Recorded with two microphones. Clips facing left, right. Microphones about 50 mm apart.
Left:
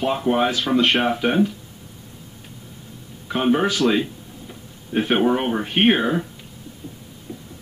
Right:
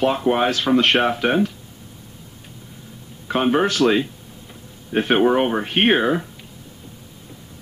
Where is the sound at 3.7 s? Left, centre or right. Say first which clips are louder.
Right 2 dB; centre.